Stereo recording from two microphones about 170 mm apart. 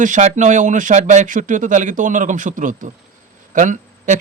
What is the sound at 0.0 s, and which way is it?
Speech, 45° right (ahead or behind).